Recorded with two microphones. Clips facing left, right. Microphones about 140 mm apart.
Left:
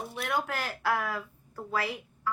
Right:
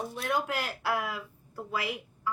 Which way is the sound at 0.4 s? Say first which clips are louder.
Left 1 dB; 15° right (ahead or behind).